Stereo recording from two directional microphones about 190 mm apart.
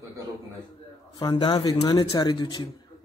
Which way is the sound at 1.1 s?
20° left (ahead or behind).